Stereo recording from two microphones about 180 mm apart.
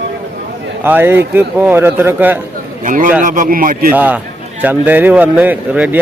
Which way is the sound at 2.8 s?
45° right (ahead or behind).